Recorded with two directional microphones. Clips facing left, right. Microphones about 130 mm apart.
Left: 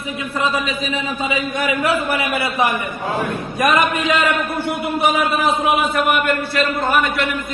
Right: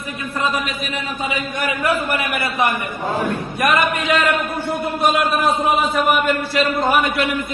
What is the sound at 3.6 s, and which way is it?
Speech, 35° left (ahead or behind).